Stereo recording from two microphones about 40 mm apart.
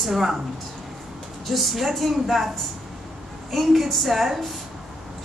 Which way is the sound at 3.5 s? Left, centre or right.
Centre.